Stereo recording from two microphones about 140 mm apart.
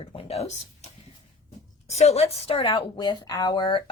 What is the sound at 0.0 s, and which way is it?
Speech, 45° left (ahead or behind).